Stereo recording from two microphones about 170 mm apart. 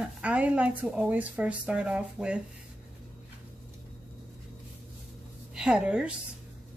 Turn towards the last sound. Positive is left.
turn(degrees=-5)  # may be behind; listen again after turning